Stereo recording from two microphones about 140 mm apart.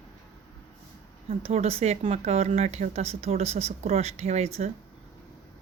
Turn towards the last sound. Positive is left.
turn(degrees=-50)  # may be behind; listen again after turning